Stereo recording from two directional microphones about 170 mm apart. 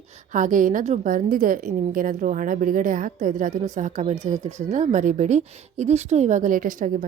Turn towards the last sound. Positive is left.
turn(degrees=-55)  # may be behind; listen again after turning